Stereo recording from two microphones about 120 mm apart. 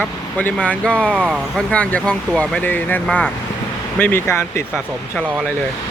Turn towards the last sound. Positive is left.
turn(degrees=20)  # may be behind; listen again after turning